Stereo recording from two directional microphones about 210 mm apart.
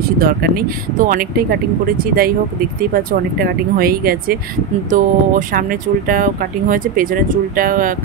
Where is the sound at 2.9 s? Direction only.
45° right (ahead or behind).